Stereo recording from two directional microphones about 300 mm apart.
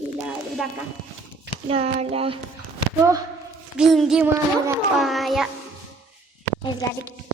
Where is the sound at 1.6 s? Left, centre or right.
Centre.